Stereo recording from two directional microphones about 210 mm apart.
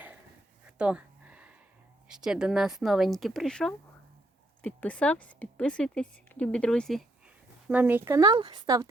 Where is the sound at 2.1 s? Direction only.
5° right (ahead or behind).